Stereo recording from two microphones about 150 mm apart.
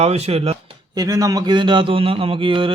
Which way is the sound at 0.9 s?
25° right (ahead or behind).